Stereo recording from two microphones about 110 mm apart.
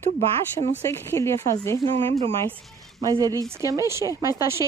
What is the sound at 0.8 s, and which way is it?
Speech, 20° left (ahead or behind).